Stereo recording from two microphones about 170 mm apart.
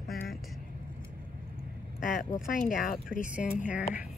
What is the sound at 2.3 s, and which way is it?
Speech, 55° left (ahead or behind).